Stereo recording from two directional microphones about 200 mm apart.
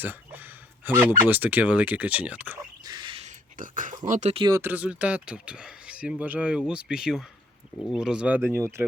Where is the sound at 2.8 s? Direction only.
20° right (ahead or behind).